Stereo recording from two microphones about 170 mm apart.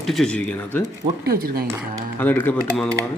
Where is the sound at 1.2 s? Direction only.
60° right (ahead or behind).